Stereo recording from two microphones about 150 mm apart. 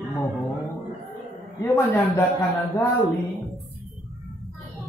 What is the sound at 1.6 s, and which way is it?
Mantra, 15° left (ahead or behind).